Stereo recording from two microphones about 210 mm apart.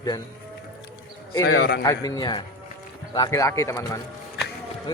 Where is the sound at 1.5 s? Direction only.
55° left (ahead or behind).